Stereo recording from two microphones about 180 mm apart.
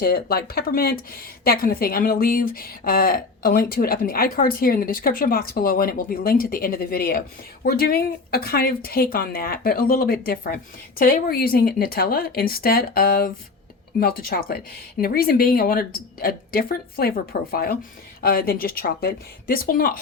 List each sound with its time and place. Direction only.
0.0 s a woman's voice: 55° left (ahead or behind)